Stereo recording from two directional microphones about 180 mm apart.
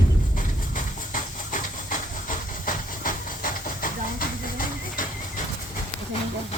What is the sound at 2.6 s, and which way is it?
Steam, 50° left (ahead or behind).